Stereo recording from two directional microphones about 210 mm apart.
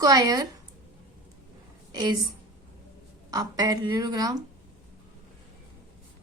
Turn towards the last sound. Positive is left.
turn(degrees=-20)  # may be behind; listen again after turning